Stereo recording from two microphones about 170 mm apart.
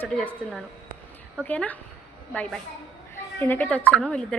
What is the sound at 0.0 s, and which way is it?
A woman's voice, 5° left (ahead or behind).